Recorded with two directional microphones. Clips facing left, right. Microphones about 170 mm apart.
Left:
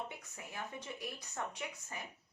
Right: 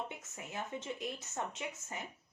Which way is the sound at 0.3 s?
20° right (ahead or behind).